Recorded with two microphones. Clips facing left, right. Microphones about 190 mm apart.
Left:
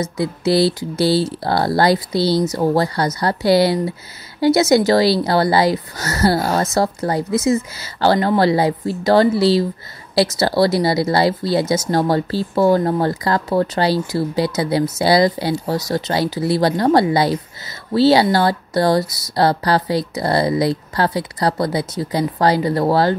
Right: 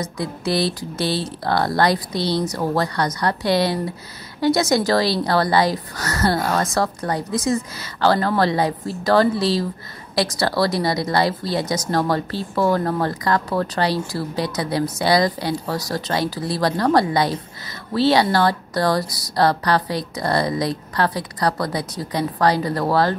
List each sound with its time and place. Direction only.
0.2 s speech: 30° left (ahead or behind)